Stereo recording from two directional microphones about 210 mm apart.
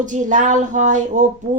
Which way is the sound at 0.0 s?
35° right (ahead or behind).